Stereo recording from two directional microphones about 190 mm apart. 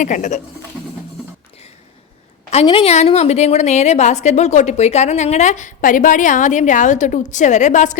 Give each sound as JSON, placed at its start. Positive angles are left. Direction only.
{"t": 0.0, "sound": "a woman's voice", "side_deg": 40}
{"t": 2.5, "sound": "a woman's voice", "side_deg": 30}